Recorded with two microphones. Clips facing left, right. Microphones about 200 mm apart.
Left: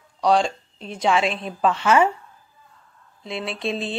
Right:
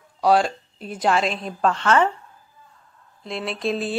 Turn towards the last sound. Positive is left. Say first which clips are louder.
# right 2 dB
turn(degrees=-5)  # may be behind; listen again after turning